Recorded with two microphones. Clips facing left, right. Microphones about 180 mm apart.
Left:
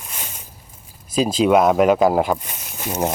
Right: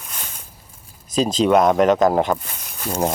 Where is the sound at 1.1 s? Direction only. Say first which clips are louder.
Even; 5° left (ahead or behind).